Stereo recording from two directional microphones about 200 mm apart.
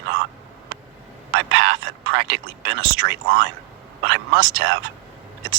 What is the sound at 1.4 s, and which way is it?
Speech, 65° right (ahead or behind).